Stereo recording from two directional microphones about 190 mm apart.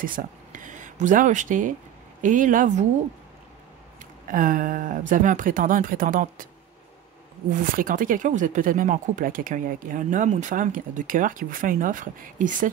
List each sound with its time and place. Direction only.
0.0 s speech: 45° right (ahead or behind)
4.3 s speech: 45° right (ahead or behind)
7.6 s speech: 45° right (ahead or behind)